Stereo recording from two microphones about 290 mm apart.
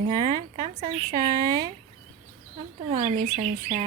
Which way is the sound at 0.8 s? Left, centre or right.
Centre.